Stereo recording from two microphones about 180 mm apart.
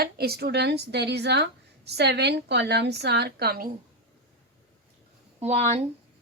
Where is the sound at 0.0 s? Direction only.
60° right (ahead or behind).